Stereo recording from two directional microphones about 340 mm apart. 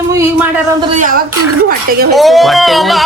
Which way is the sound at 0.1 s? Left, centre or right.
Centre.